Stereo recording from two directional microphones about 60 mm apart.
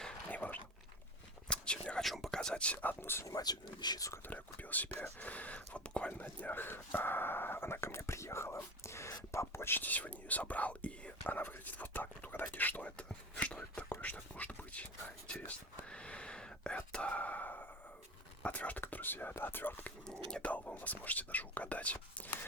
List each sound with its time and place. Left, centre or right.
0.3 s a sound: left
1.5 s whispering: centre
2.0 s whispering: centre
2.8 s speech: left
3.2 s speech: left
4.3 s speech: left
6.4 s speech: left
9.8 s speech: left
13.9 s speech: left
20.1 s speech: centre
20.5 s speech: left